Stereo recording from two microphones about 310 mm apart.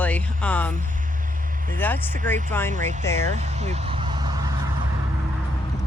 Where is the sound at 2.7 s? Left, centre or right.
Right.